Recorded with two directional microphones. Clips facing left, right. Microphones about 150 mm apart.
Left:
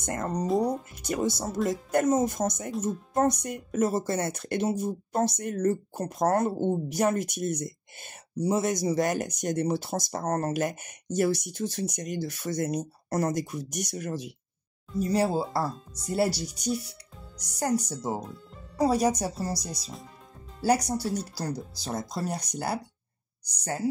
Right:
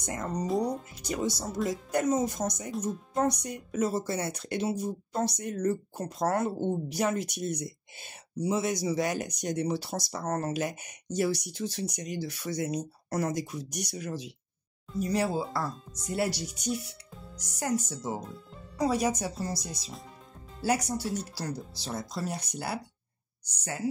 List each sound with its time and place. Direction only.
0.0 s speech: 50° left (ahead or behind)
15.0 s speech: 35° left (ahead or behind)
20.6 s speech: 35° left (ahead or behind)